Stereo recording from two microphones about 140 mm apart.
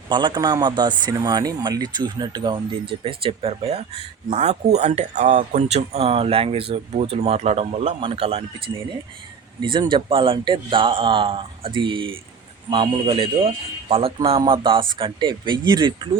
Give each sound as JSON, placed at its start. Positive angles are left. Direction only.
{"t": 0.1, "sound": "speech", "side_deg": -35}
{"t": 5.6, "sound": "speech", "side_deg": -50}